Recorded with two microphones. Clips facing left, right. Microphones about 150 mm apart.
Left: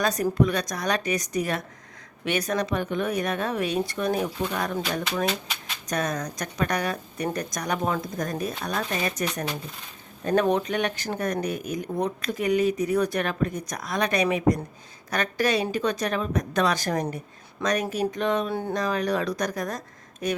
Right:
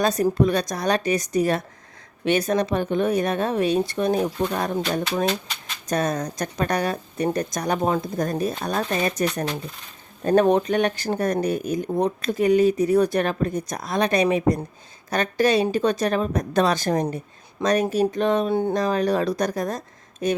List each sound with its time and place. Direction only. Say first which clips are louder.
0.0 s speech: right 3 dB; 30° right (ahead or behind)
5.9 s speech: right 4 dB; 30° right (ahead or behind)